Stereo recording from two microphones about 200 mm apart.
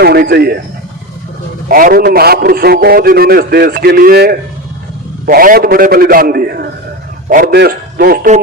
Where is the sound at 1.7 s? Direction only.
45° right (ahead or behind).